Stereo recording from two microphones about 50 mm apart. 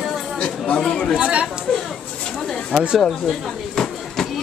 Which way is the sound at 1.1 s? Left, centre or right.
Right.